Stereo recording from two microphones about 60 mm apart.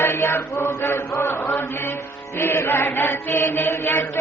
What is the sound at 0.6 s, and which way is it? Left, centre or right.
Chant, left.